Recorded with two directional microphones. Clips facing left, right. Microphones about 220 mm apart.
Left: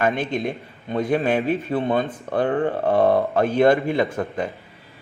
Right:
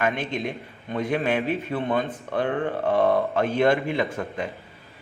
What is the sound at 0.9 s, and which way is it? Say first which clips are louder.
Speech: left 4 dB; 35° left (ahead or behind).